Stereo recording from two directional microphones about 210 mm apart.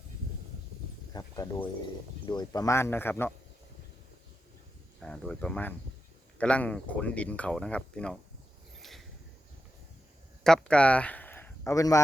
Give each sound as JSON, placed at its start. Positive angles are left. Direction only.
{"t": 1.1, "sound": "speech", "side_deg": 15}
{"t": 4.9, "sound": "speech", "side_deg": 5}
{"t": 8.8, "sound": "a sound", "side_deg": 0}
{"t": 10.4, "sound": "speech", "side_deg": 5}